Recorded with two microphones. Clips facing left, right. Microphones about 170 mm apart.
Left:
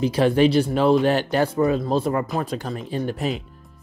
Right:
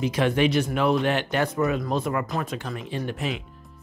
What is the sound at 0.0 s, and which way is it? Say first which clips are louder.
Speech: left 5 dB; 35° left (ahead or behind).